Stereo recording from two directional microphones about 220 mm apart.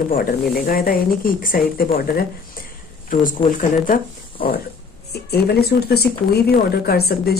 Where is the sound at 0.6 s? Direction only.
40° left (ahead or behind).